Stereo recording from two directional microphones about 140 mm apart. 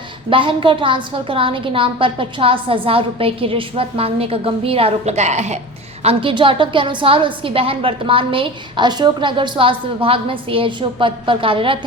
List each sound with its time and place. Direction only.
0.3 s a woman's voice: 40° right (ahead or behind); by 5.5 s 55° right (ahead or behind)
6.0 s a woman's voice: 45° right (ahead or behind)